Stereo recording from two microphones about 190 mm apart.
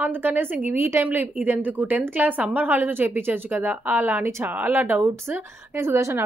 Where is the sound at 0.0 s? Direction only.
10° right (ahead or behind).